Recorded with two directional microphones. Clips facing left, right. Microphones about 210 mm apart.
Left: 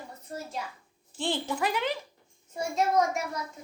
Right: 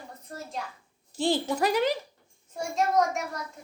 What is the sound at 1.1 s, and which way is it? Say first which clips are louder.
Speech: right 5 dB; 40° right (ahead or behind).